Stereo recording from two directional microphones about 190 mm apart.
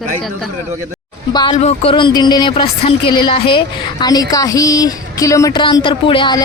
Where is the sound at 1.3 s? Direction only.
25° left (ahead or behind).